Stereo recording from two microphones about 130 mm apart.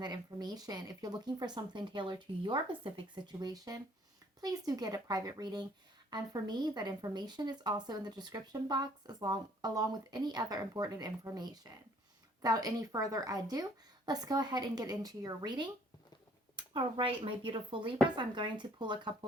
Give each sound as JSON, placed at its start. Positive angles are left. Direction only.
{"t": 0.0, "sound": "speech", "side_deg": -35}